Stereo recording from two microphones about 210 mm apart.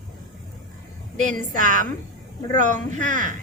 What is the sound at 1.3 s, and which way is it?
Speech, 40° right (ahead or behind).